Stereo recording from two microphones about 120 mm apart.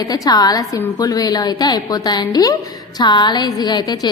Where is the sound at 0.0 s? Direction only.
30° left (ahead or behind).